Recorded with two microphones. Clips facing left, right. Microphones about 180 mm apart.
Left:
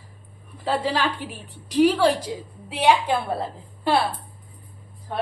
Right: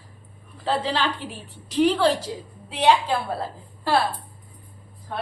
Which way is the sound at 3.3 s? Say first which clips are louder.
Left 1 dB; 20° left (ahead or behind).